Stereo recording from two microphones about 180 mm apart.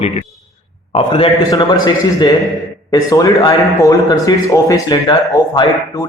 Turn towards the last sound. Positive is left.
turn(degrees=20)  # may be behind; listen again after turning